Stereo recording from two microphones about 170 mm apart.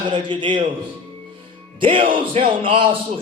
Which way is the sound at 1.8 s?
30° right (ahead or behind).